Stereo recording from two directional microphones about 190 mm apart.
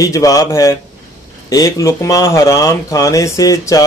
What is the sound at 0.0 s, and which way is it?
Speech, 15° left (ahead or behind).